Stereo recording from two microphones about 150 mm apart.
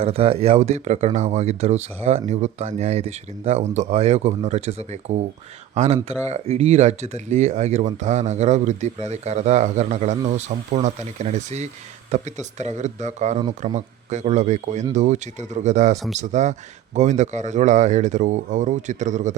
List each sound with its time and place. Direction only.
0.0 s speech: 45° right (ahead or behind)